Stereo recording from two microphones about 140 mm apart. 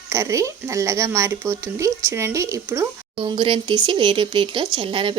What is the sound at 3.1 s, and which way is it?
Speech, 35° right (ahead or behind).